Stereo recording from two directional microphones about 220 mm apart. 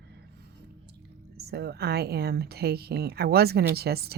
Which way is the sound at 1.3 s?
45° right (ahead or behind).